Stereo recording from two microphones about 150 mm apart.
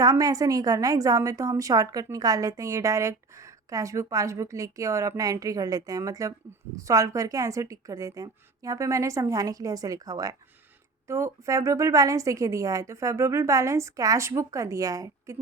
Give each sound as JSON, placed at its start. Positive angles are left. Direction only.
{"t": 0.0, "sound": "a woman's voice", "side_deg": -25}